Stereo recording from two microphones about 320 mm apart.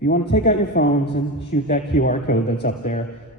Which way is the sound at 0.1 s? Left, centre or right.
Left.